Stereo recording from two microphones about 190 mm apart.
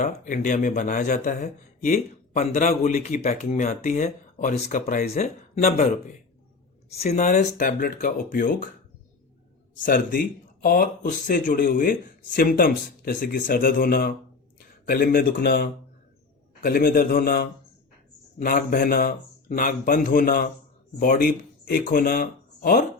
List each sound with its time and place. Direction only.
0.0 s speech: 40° left (ahead or behind)
6.9 s speech: 35° left (ahead or behind)
9.7 s speech: 45° left (ahead or behind)